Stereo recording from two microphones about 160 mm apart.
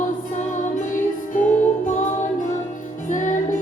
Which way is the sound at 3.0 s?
50° left (ahead or behind).